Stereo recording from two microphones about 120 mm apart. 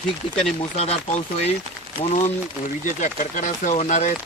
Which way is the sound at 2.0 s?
55° left (ahead or behind).